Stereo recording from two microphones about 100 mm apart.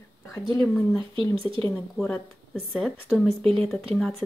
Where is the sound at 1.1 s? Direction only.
65° right (ahead or behind).